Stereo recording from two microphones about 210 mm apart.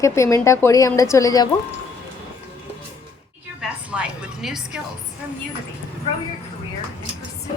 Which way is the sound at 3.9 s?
5° right (ahead or behind).